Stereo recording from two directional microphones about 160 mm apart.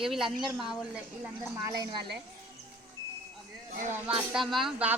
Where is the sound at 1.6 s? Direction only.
20° right (ahead or behind).